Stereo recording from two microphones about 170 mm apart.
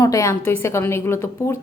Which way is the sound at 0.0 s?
20° left (ahead or behind).